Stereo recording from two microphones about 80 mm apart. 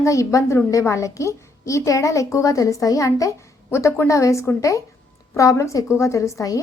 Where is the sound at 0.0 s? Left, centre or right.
Left.